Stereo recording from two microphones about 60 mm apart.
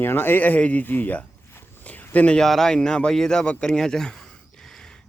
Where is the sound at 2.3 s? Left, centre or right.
Centre.